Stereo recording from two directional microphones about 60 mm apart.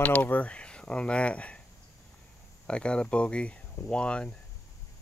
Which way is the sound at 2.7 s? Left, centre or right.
Centre.